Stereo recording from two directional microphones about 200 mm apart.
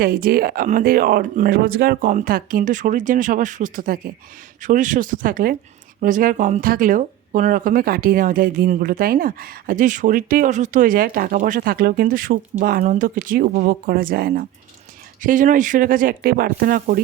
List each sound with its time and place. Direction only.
0.0 s speech: 45° right (ahead or behind)